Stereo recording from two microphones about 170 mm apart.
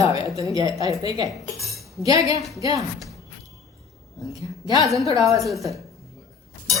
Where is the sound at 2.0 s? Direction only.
20° right (ahead or behind).